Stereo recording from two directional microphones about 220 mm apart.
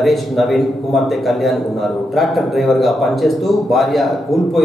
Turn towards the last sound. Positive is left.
turn(degrees=0)  # may be behind; listen again after turning